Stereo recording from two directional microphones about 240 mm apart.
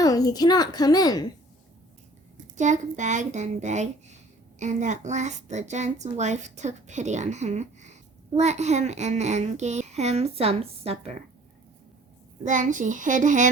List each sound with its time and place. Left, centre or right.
0.0 s a child's voice: centre
2.6 s a woman's voice: right
12.5 s a child's voice: right